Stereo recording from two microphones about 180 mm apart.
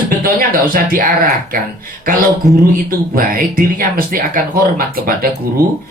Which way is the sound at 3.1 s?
50° right (ahead or behind).